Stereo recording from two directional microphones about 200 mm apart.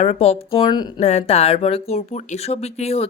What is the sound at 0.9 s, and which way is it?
Speech, 35° left (ahead or behind).